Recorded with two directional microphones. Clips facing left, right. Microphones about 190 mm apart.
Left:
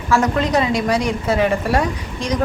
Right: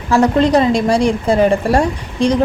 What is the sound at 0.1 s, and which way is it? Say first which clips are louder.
A woman's voice: right 5 dB; 35° right (ahead or behind).